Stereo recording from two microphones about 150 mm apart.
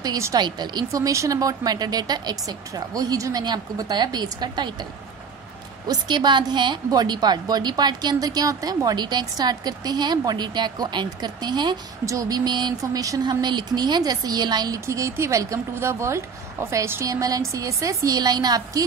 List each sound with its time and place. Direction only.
0.0 s a woman's voice: 25° right (ahead or behind)
5.9 s a woman's voice: 30° right (ahead or behind)